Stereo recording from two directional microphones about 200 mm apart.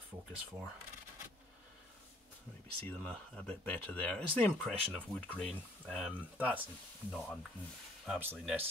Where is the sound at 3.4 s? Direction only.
5° left (ahead or behind).